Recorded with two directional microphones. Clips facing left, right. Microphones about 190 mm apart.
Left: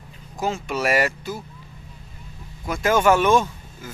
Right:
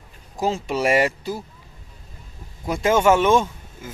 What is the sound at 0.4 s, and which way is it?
Speech, 30° right (ahead or behind).